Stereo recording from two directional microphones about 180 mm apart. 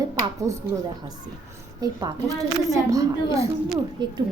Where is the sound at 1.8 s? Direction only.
25° right (ahead or behind).